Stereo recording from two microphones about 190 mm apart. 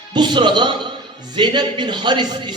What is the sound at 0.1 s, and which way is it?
A man's voice, 25° right (ahead or behind).